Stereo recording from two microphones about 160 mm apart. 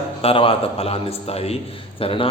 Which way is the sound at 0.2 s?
35° left (ahead or behind).